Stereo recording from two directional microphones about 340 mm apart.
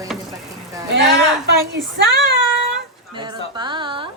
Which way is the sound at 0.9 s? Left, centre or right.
Right.